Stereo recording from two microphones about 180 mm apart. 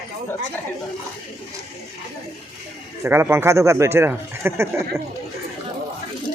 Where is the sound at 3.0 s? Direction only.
15° right (ahead or behind).